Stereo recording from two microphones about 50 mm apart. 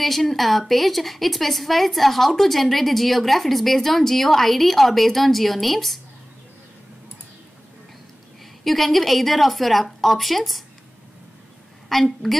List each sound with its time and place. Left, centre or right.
0.0 s a woman's voice: centre
8.6 s a woman's voice: centre
11.9 s a woman's voice: centre